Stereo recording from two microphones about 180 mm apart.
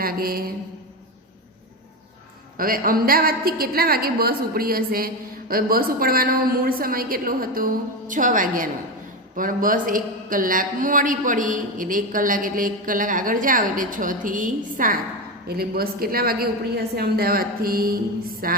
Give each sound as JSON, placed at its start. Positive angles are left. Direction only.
{"t": 0.0, "sound": "mantra", "side_deg": -55}
{"t": 2.6, "sound": "a woman's voice", "side_deg": -50}
{"t": 15.4, "sound": "a woman's voice", "side_deg": -60}